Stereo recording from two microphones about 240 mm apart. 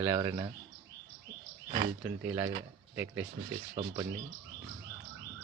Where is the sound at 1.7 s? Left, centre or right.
Right.